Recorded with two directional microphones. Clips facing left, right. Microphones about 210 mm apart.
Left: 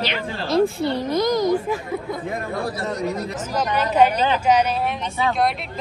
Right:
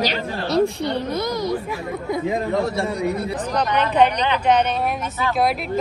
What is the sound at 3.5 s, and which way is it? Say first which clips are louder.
Speech: even; 5° left (ahead or behind).